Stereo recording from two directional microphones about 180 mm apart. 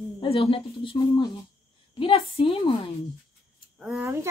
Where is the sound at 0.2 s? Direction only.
30° left (ahead or behind).